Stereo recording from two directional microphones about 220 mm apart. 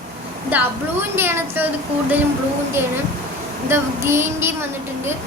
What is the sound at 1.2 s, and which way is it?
Speech, 10° right (ahead or behind).